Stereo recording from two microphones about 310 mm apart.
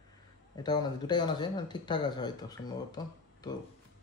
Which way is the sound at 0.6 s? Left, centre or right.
Centre.